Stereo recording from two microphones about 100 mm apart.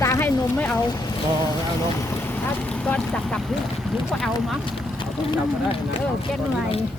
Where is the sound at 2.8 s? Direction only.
10° left (ahead or behind).